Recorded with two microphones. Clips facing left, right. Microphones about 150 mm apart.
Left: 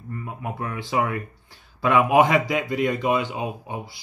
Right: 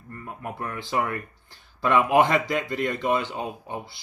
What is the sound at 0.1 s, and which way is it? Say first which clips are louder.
Speech: left 3 dB; 5° left (ahead or behind).